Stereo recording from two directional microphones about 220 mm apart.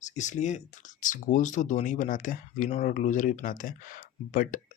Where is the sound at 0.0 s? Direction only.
35° left (ahead or behind).